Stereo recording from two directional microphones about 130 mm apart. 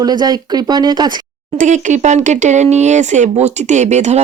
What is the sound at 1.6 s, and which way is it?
Speech, 70° right (ahead or behind).